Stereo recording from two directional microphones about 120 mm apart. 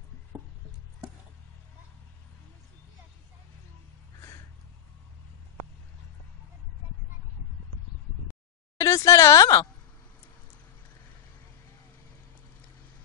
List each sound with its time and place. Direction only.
8.7 s speech: 25° left (ahead or behind)